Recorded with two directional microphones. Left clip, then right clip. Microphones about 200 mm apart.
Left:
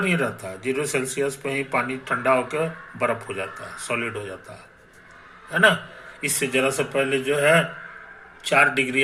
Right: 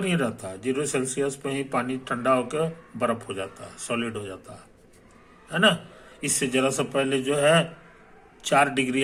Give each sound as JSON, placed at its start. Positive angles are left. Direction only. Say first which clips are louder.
{"t": 0.0, "sound": "speech", "louder": "left 4 dB", "side_deg": -20}
{"t": 5.5, "sound": "a man's voice", "louder": "left 4 dB", "side_deg": -20}